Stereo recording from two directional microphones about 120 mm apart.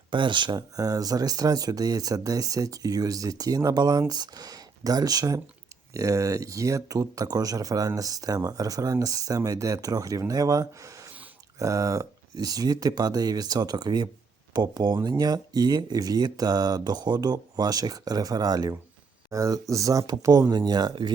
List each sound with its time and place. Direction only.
0.1 s speech: 40° right (ahead or behind)